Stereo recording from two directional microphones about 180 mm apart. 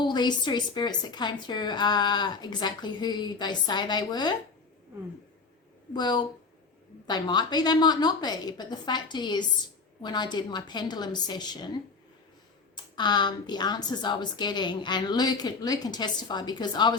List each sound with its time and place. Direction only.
0.0 s a woman's voice: 25° left (ahead or behind)
5.9 s a woman's voice: 25° left (ahead or behind)
12.7 s a woman's voice: 25° left (ahead or behind)